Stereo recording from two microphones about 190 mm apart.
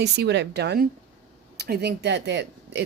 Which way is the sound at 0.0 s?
65° right (ahead or behind).